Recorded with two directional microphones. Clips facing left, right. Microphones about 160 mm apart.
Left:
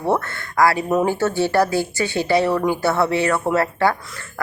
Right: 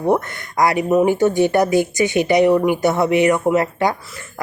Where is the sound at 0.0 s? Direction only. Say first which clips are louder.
Right 3 dB; 15° right (ahead or behind).